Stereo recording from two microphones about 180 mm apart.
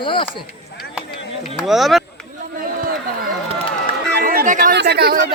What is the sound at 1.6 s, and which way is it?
Speech, centre (ahead or behind).